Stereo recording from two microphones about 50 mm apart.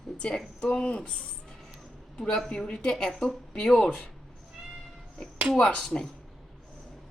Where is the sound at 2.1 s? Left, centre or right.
Centre.